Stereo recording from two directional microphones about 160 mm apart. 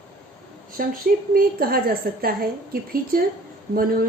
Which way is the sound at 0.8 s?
60° right (ahead or behind).